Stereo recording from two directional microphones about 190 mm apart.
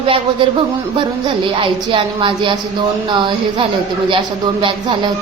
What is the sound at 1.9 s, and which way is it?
A woman's voice, 25° right (ahead or behind).